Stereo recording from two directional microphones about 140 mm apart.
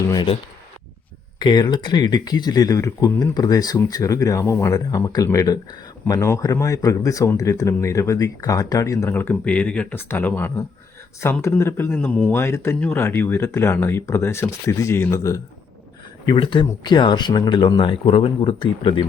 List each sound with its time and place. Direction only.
0.1 s speech: 35° left (ahead or behind)
1.4 s a man's voice: 30° left (ahead or behind)
16.2 s speech: 35° left (ahead or behind)